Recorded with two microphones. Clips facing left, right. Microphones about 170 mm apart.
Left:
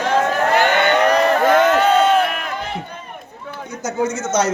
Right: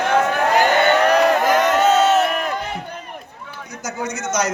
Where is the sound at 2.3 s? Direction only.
40° right (ahead or behind).